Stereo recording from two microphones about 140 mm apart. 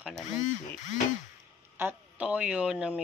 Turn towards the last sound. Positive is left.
turn(degrees=-5)  # may be behind; listen again after turning